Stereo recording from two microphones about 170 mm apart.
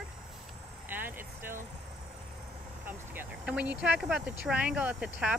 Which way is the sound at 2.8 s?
10° right (ahead or behind).